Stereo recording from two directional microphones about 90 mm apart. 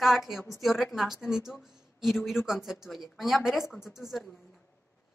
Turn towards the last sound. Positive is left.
turn(degrees=0)  # may be behind; listen again after turning